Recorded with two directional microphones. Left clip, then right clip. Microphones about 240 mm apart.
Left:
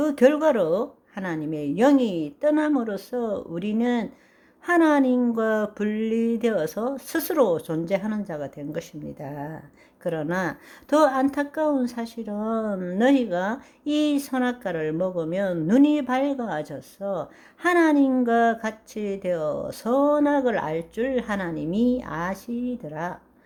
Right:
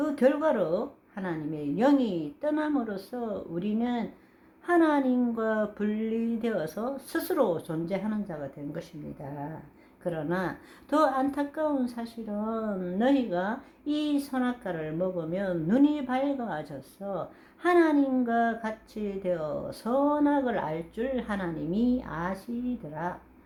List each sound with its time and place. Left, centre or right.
0.0 s a woman's voice: left